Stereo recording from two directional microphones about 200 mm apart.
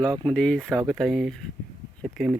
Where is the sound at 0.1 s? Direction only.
25° right (ahead or behind).